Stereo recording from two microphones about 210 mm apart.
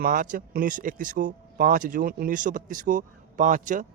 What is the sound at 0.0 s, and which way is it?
A man's voice, 40° right (ahead or behind).